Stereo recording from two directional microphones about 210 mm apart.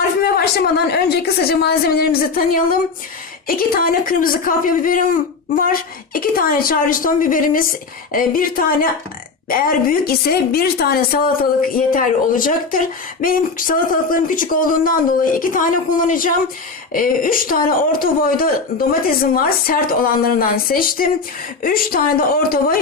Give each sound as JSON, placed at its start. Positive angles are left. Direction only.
{"t": 0.2, "sound": "a woman's voice", "side_deg": 50}